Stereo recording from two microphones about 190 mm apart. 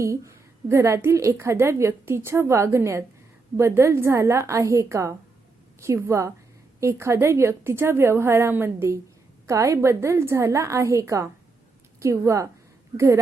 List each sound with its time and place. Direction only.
0.0 s a woman's voice: 15° right (ahead or behind)